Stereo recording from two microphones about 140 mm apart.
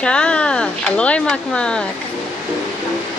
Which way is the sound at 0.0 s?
5° left (ahead or behind).